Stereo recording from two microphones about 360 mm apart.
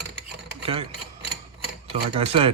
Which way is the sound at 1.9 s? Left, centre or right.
Centre.